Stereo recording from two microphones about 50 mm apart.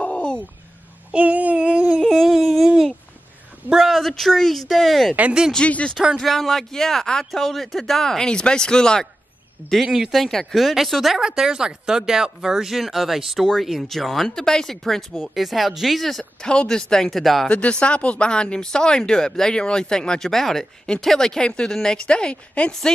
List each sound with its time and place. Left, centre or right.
0.0 s a sound: left
1.1 s a sound: right
2.0 s a sound: centre
4.0 s speech: centre
5.6 s speech: left
6.1 s speech: centre
9.8 s speech: centre
11.1 s speech: centre
16.4 s speech: centre
17.1 s speech: centre
17.5 s speech: left